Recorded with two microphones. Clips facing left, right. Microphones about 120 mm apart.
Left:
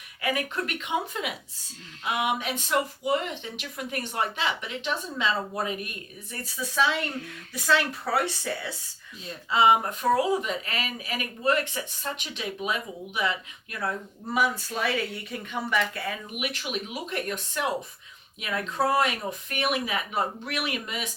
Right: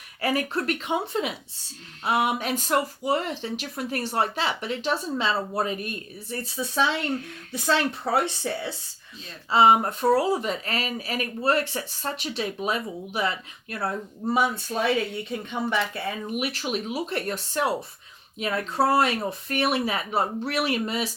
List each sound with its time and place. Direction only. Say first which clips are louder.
0.2 s speech: right 3 dB; 35° right (ahead or behind)
9.5 s speech: right 3 dB; 35° right (ahead or behind)